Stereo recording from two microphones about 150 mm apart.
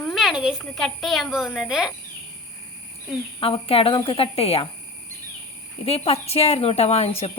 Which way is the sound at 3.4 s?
40° left (ahead or behind).